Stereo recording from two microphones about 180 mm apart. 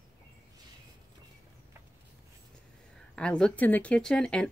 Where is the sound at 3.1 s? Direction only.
5° left (ahead or behind).